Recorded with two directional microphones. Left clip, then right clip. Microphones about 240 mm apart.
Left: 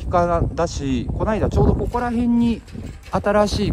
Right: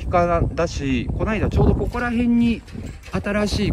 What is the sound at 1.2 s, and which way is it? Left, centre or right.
Speech, centre.